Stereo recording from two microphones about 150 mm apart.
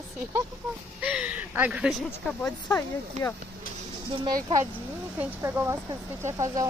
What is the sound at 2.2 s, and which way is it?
Speech, 5° left (ahead or behind).